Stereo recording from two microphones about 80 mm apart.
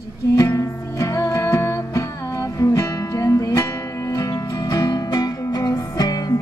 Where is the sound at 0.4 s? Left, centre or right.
Left.